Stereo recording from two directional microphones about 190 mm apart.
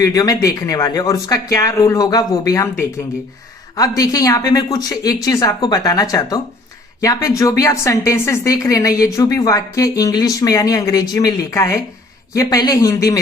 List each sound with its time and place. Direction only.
0.0 s a woman's voice: 20° left (ahead or behind)